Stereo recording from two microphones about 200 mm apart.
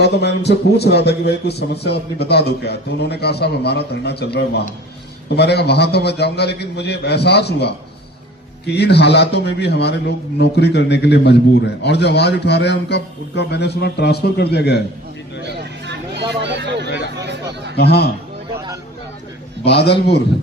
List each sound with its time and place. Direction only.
0.0 s a man's voice: 55° left (ahead or behind)
16.4 s vehicle: 60° right (ahead or behind)
17.2 s chatter: 60° right (ahead or behind)
19.6 s a man's voice: 55° left (ahead or behind)